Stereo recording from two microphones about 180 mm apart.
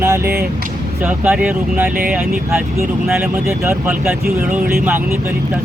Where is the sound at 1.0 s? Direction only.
5° right (ahead or behind).